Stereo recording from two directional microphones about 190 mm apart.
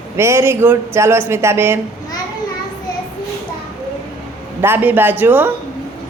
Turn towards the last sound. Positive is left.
turn(degrees=-10)  # may be behind; listen again after turning